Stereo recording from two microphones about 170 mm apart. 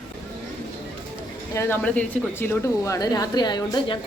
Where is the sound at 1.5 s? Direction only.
10° left (ahead or behind).